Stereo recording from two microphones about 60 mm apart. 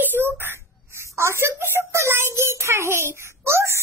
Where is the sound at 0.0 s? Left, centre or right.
Right.